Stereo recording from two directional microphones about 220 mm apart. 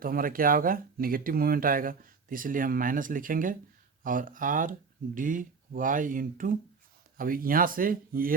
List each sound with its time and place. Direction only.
0.0 s speech: 40° right (ahead or behind)